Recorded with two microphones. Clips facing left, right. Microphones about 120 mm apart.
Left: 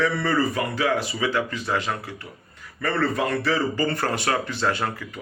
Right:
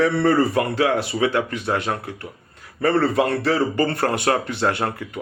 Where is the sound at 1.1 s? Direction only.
60° right (ahead or behind).